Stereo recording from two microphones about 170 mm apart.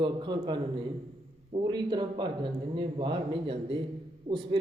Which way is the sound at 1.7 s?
25° right (ahead or behind).